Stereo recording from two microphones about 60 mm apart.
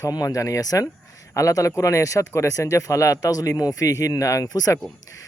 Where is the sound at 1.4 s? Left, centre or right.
Left.